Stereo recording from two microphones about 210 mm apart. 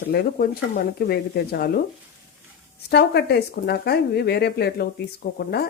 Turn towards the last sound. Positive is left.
turn(degrees=45)  # may be behind; listen again after turning